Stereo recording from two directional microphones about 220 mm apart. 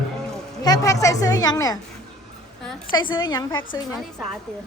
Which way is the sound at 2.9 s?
20° left (ahead or behind).